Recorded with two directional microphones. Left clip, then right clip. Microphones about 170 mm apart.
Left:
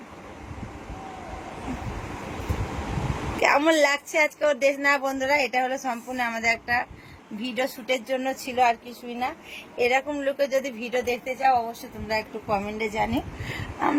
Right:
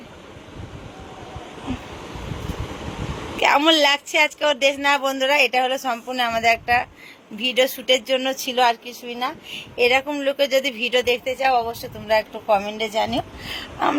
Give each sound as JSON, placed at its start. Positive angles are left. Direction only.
{"t": 3.4, "sound": "speech", "side_deg": 5}